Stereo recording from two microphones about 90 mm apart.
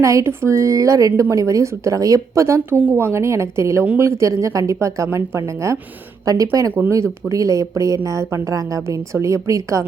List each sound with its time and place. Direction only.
0.0 s a woman's voice: 35° right (ahead or behind)